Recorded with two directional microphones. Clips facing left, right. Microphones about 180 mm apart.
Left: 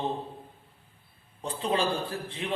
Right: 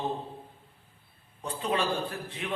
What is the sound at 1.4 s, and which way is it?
A man's voice, 30° left (ahead or behind).